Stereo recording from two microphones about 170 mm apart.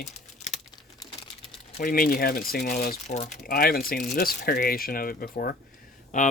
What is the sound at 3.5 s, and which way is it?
Speech, 60° left (ahead or behind).